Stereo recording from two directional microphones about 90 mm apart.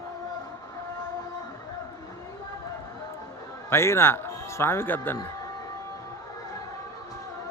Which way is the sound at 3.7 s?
30° left (ahead or behind).